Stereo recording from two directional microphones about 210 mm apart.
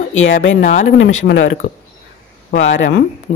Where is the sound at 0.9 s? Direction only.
65° left (ahead or behind).